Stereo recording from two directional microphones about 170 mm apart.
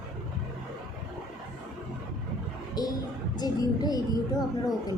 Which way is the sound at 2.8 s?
25° left (ahead or behind).